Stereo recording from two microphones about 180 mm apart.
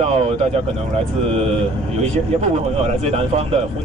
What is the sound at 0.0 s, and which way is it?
Speech, 35° right (ahead or behind).